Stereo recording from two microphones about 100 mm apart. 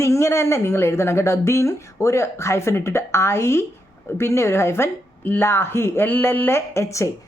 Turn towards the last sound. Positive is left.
turn(degrees=30)  # may be behind; listen again after turning